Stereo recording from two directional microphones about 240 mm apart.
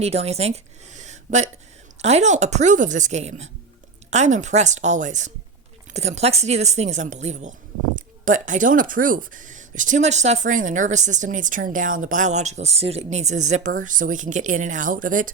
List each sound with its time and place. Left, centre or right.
0.0 s speech: right